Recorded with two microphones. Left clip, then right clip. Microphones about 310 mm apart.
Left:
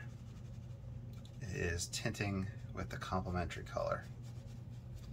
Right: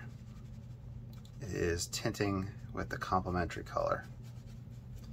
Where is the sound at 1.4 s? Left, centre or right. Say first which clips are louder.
Right 6 dB; centre.